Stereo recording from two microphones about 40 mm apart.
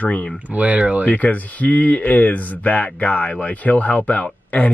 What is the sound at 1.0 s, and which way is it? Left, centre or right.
Speech, left.